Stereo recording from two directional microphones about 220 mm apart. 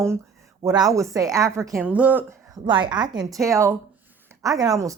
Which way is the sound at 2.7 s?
20° right (ahead or behind).